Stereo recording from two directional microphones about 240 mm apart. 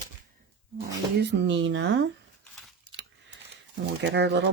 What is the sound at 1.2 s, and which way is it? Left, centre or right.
Speech, right.